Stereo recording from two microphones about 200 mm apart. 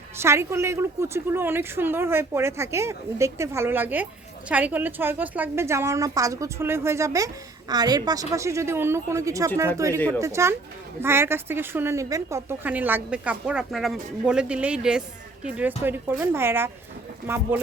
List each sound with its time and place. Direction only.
0.2 s a woman's voice: 15° right (ahead or behind)